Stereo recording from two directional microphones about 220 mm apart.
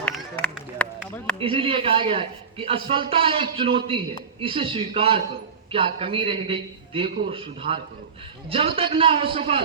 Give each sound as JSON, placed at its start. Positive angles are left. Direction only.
{"t": 0.0, "sound": "run", "side_deg": 5}
{"t": 1.4, "sound": "a man's voice", "side_deg": -25}